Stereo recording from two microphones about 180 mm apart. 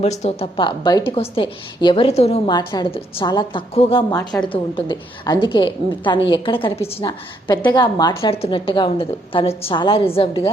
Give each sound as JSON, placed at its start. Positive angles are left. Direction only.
{"t": 0.0, "sound": "a woman's voice", "side_deg": 35}
{"t": 2.5, "sound": "a woman's voice", "side_deg": 20}
{"t": 4.1, "sound": "a woman's voice", "side_deg": 20}